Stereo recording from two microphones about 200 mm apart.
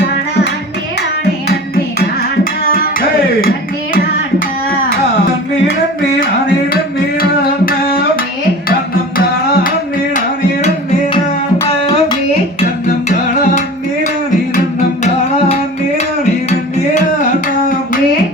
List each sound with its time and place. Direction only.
2.0 s music: 45° left (ahead or behind)
7.2 s music: 45° left (ahead or behind)
11.5 s a sound: 10° left (ahead or behind)